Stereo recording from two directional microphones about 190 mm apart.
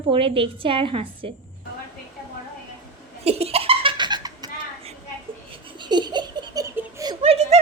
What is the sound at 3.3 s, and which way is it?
Laughter, 30° right (ahead or behind).